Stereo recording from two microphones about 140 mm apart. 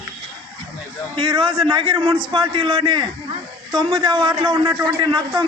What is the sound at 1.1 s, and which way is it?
A man's voice, 35° right (ahead or behind).